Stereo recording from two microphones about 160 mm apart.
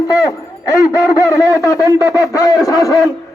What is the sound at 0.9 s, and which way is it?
A man's voice, 20° left (ahead or behind).